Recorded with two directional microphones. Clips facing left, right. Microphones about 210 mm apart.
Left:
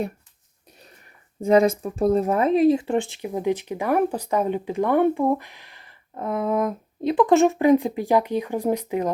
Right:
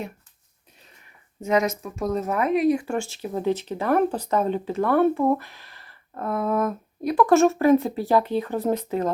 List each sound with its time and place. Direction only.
0.8 s speech: 40° left (ahead or behind); by 9.0 s 10° left (ahead or behind)